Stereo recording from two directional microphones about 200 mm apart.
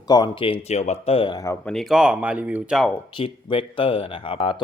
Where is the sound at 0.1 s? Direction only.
20° left (ahead or behind).